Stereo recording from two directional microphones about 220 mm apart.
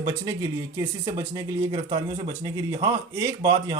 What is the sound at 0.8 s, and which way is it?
Speech, 15° right (ahead or behind).